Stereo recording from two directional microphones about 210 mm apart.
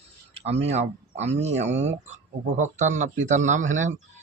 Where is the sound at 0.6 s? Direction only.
30° right (ahead or behind).